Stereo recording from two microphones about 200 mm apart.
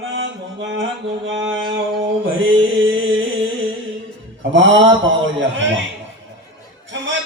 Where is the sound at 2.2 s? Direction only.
75° right (ahead or behind).